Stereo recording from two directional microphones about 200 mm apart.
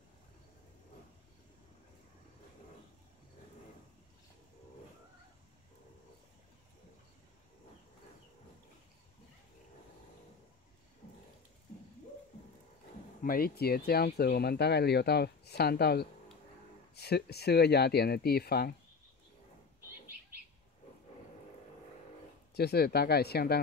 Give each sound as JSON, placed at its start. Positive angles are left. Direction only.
{"t": 13.2, "sound": "speech", "side_deg": 45}
{"t": 22.5, "sound": "speech", "side_deg": 55}